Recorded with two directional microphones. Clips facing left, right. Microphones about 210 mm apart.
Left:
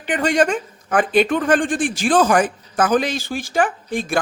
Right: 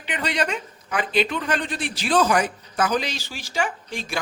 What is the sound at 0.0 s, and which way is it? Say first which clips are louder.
Speech: left 8 dB; 50° left (ahead or behind).